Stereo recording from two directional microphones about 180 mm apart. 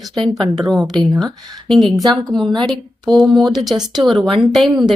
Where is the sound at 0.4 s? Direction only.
25° right (ahead or behind).